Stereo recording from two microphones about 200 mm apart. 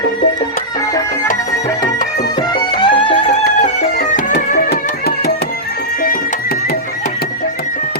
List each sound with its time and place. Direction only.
2.7 s music: 25° left (ahead or behind)
3.6 s music: 45° left (ahead or behind)